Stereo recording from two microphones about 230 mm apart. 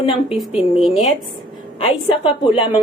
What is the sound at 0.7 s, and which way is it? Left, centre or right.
Speech, centre.